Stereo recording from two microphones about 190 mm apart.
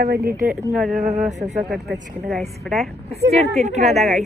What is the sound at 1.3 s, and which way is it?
Speech, 35° right (ahead or behind).